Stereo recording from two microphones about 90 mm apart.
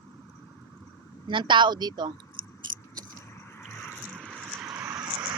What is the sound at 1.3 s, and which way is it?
Speech, 65° right (ahead or behind).